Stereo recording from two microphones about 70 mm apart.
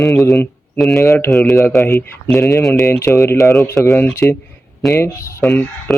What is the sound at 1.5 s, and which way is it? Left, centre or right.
Speech, left.